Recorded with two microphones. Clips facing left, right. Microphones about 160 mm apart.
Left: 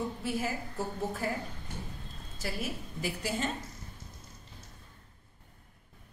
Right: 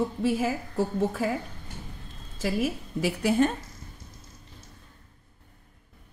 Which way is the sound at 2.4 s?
85° right.